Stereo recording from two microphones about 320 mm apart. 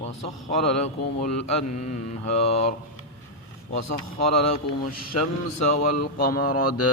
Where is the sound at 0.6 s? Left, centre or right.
Left.